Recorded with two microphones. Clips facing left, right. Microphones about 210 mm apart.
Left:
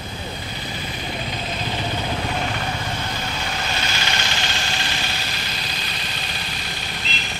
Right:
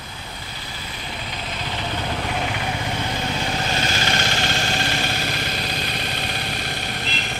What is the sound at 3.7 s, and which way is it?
Vehicle, 45° right (ahead or behind).